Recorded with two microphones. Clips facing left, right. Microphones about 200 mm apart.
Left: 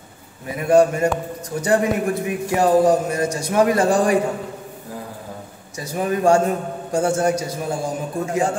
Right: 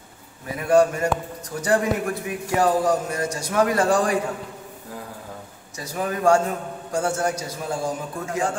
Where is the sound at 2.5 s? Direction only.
25° left (ahead or behind).